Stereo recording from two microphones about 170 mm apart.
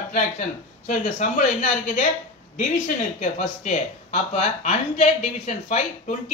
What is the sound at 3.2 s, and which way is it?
Speech, 45° left (ahead or behind).